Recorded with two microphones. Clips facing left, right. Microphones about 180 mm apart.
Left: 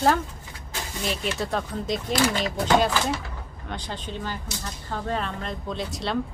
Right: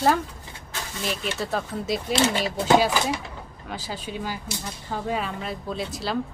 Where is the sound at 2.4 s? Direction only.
25° right (ahead or behind).